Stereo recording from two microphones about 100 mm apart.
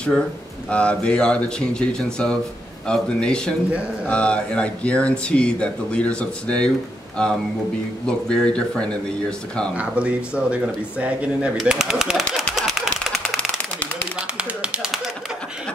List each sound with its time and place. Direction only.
0.7 s speech: 10° left (ahead or behind)
9.8 s speech: 10° right (ahead or behind)
11.5 s a sound: 5° right (ahead or behind)